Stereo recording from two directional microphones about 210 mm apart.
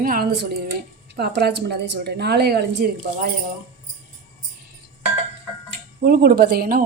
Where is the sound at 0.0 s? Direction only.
45° right (ahead or behind).